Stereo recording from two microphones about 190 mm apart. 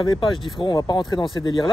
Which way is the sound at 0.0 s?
25° left (ahead or behind).